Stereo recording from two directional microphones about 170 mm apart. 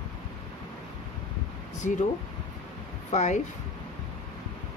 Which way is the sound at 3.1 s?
45° left (ahead or behind).